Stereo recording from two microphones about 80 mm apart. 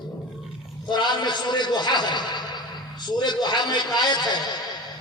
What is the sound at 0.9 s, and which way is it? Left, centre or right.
A man's voice, left.